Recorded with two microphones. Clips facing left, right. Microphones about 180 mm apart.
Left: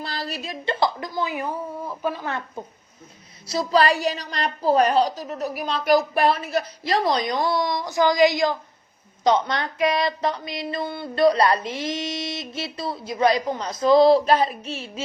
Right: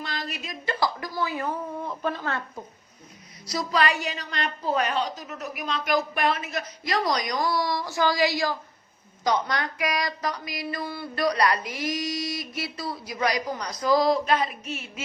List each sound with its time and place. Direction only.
0.0 s a woman's voice: 35° left (ahead or behind); by 2.4 s 15° left (ahead or behind)
3.4 s a woman's voice: 25° left (ahead or behind)
9.2 s a sound: 25° left (ahead or behind)